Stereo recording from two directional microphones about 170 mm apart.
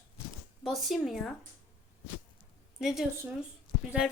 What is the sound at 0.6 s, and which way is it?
Speech, centre (ahead or behind).